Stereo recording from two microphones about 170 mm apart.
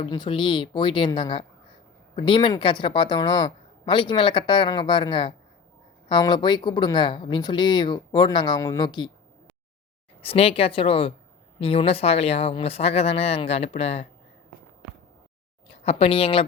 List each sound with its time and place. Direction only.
0.1 s speech: 30° left (ahead or behind)
10.2 s speech: 35° left (ahead or behind)
15.7 s speech: 35° left (ahead or behind)